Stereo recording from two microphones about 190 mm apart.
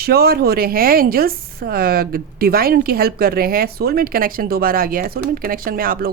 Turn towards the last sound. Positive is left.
turn(degrees=-50)  # may be behind; listen again after turning